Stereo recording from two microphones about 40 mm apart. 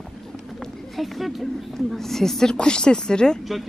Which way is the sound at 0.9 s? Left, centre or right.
Centre.